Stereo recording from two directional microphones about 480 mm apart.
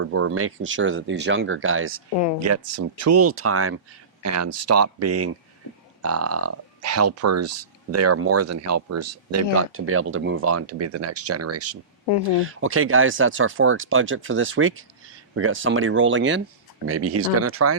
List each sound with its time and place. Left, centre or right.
0.0 s speech: right